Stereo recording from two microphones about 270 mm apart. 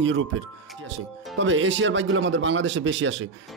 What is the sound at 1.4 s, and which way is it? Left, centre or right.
Speech, right.